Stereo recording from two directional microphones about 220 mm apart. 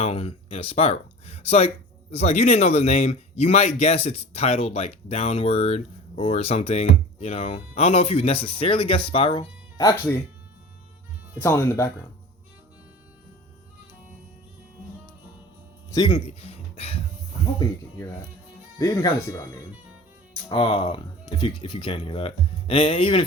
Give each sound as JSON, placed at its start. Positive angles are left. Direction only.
{"t": 0.0, "sound": "speech", "side_deg": 25}
{"t": 11.3, "sound": "speech", "side_deg": 10}
{"t": 15.9, "sound": "speech", "side_deg": 20}
{"t": 18.8, "sound": "speech", "side_deg": 15}
{"t": 20.5, "sound": "speech", "side_deg": 20}